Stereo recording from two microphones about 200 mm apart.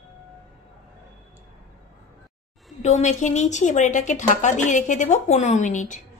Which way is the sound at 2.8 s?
35° left (ahead or behind).